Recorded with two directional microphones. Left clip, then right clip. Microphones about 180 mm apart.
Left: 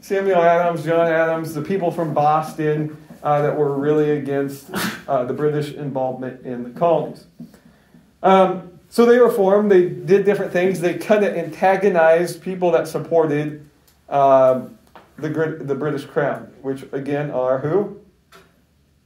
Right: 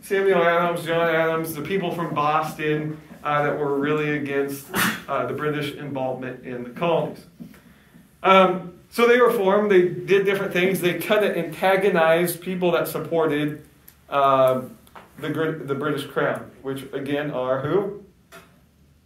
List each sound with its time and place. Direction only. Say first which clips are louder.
0.1 s speech: left 3 dB; 40° left (ahead or behind); by 4.4 s 70° left (ahead or behind)
4.6 s speech: right 2 dB; 40° left (ahead or behind)
5.4 s speech: left 5 dB; 70° left (ahead or behind)
8.2 s speech: left 2 dB; 70° left (ahead or behind); by 17.7 s 45° left (ahead or behind)